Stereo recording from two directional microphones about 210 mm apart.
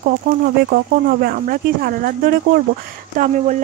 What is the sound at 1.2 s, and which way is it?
Speech, 45° right (ahead or behind).